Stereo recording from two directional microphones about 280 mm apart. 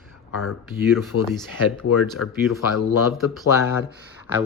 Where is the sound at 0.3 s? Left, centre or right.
Left.